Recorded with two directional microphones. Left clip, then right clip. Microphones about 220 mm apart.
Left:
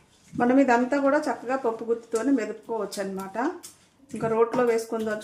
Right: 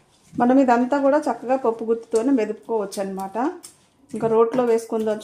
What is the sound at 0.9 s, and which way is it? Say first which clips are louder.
Speech: right 4 dB; 20° right (ahead or behind).